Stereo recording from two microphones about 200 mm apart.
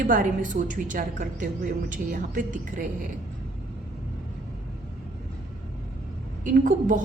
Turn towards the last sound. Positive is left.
turn(degrees=-40)  # may be behind; listen again after turning